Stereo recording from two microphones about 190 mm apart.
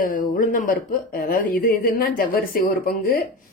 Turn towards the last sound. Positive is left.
turn(degrees=50)  # may be behind; listen again after turning